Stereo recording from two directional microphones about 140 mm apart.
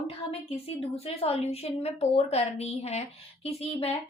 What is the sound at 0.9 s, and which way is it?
A woman's voice, 45° left (ahead or behind).